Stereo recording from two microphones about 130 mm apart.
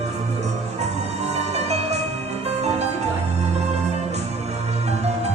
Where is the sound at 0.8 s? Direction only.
55° right (ahead or behind).